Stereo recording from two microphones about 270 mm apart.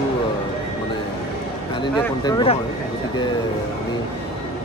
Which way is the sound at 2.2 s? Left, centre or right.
Centre.